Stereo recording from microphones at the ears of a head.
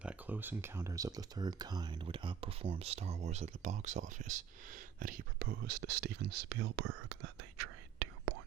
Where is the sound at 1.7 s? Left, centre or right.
Right.